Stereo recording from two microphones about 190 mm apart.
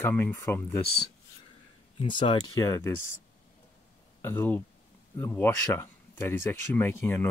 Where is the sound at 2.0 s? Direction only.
25° left (ahead or behind).